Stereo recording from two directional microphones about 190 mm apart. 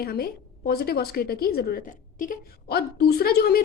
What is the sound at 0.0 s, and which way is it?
A woman's voice, 55° left (ahead or behind).